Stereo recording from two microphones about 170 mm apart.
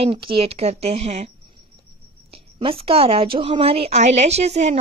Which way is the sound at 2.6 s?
35° right (ahead or behind).